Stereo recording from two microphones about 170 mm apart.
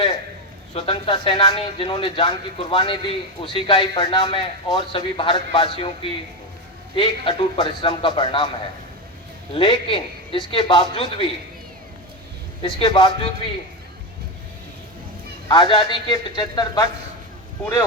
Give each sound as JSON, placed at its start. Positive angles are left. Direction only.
{"t": 0.7, "sound": "a man's voice", "side_deg": 35}
{"t": 9.5, "sound": "a man's voice", "side_deg": 30}
{"t": 12.6, "sound": "a man's voice", "side_deg": 25}
{"t": 15.4, "sound": "a man's voice", "side_deg": 25}